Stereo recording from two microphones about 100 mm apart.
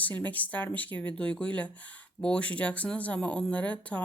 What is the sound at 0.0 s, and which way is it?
Speech, 15° left (ahead or behind).